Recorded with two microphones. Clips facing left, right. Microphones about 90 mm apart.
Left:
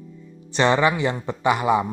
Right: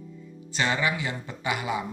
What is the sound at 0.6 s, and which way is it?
Speech, 40° left (ahead or behind).